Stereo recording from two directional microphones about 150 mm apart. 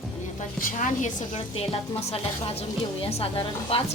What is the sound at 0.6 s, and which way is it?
Speech, 55° left (ahead or behind).